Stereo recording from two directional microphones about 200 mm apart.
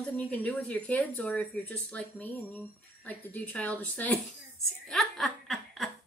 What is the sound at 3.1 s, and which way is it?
Speech, 5° left (ahead or behind).